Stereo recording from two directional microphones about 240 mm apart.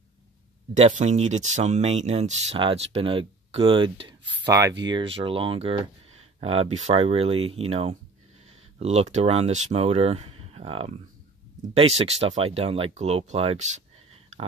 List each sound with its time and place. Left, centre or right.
0.7 s speech: right